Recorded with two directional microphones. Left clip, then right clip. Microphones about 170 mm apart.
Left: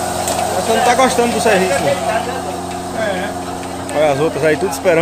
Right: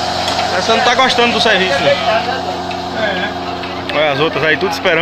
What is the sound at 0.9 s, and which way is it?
Speech, 15° left (ahead or behind).